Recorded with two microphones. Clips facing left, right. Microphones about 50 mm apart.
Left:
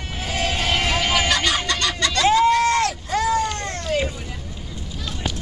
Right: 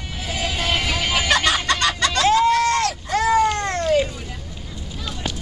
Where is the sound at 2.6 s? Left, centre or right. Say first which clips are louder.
Even; centre.